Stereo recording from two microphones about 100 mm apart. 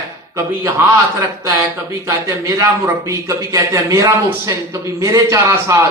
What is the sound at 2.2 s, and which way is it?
A man's voice, 30° right (ahead or behind).